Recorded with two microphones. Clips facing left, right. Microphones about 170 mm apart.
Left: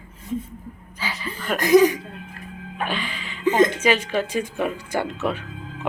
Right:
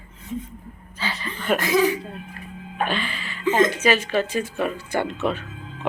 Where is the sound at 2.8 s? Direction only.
10° left (ahead or behind).